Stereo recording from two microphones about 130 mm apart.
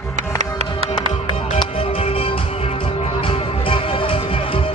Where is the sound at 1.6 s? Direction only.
45° left (ahead or behind).